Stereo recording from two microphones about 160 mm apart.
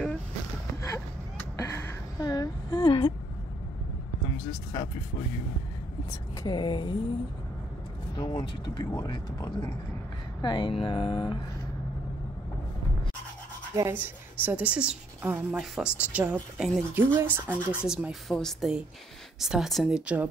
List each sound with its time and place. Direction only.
1.6 s a sound: 15° left (ahead or behind)
6.0 s speech: 25° left (ahead or behind)
8.2 s speech: 25° left (ahead or behind)
13.7 s a woman's voice: 15° right (ahead or behind)